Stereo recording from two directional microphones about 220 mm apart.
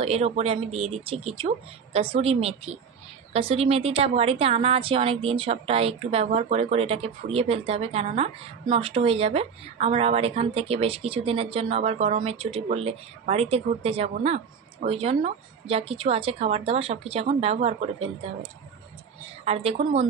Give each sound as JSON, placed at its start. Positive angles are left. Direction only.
{"t": 0.0, "sound": "a woman's voice", "side_deg": -30}
{"t": 19.4, "sound": "a woman's voice", "side_deg": -30}